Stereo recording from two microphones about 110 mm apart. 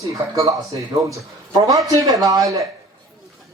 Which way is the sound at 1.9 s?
35° right (ahead or behind).